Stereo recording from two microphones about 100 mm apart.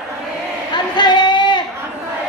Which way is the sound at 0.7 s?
50° left (ahead or behind).